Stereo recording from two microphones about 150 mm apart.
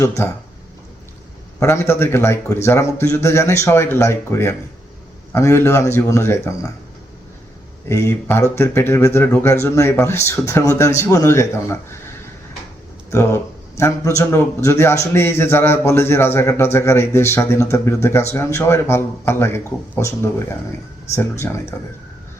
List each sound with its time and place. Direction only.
0.0 s speech: 20° left (ahead or behind)
1.5 s speech: 20° left (ahead or behind)
7.9 s speech: 20° left (ahead or behind)
13.1 s a man's voice: 20° left (ahead or behind)